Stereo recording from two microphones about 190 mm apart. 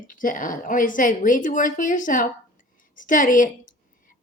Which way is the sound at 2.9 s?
45° left (ahead or behind).